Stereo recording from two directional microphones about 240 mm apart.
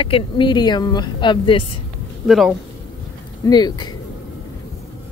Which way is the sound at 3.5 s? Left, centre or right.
Centre.